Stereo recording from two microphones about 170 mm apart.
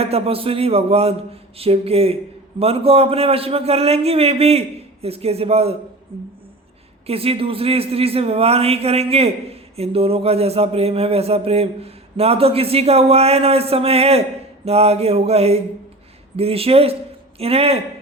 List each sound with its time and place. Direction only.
0.0 s a man's voice: 35° right (ahead or behind)
7.1 s a man's voice: 35° right (ahead or behind)